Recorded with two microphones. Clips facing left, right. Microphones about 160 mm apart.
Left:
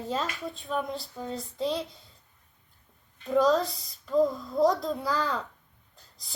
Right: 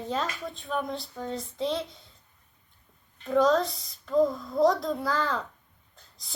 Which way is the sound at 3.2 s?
Centre (ahead or behind).